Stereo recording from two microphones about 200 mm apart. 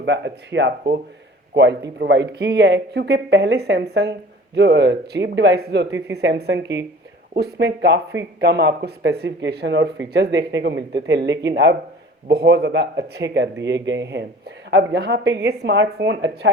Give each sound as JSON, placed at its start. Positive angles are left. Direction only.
{"t": 0.0, "sound": "speech", "side_deg": -60}